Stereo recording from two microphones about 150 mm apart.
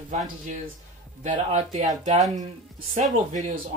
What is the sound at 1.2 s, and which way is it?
Speech, 50° right (ahead or behind).